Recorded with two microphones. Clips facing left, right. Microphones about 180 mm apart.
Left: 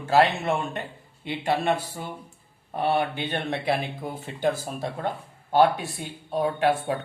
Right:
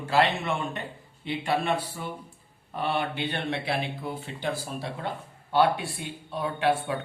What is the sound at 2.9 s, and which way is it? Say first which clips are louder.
A man's voice: left 3 dB; 45° left (ahead or behind).